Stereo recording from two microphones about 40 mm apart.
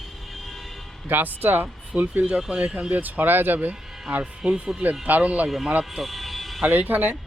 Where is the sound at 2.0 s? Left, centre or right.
Right.